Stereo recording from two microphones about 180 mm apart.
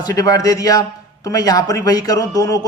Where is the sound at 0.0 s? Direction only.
20° left (ahead or behind).